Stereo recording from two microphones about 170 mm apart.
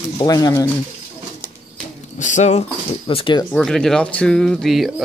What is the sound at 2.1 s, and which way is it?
Speech, 45° left (ahead or behind).